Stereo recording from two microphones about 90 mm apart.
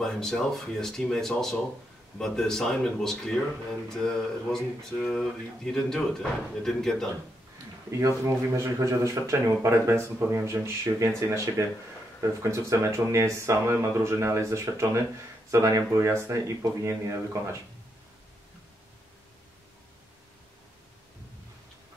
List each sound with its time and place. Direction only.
0.0 s speech: 5° left (ahead or behind)
8.5 s speech: 35° right (ahead or behind)